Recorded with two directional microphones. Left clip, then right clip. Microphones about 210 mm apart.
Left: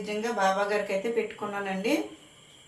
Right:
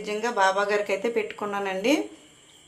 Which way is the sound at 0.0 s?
55° right (ahead or behind).